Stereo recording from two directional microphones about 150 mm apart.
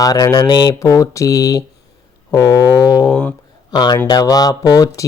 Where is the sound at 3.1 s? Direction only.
5° left (ahead or behind).